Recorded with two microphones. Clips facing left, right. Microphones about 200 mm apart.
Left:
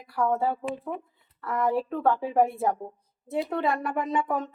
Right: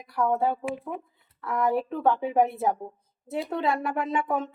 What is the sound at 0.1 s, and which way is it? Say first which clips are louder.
Speech: right 1 dB; centre (ahead or behind).